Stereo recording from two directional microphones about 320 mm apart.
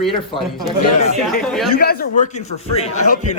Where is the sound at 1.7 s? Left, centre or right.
Left.